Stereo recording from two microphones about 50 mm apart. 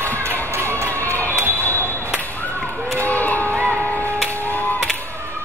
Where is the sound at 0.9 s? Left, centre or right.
Left.